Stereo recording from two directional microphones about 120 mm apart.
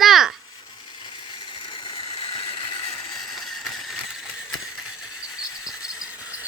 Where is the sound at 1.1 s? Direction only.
45° left (ahead or behind).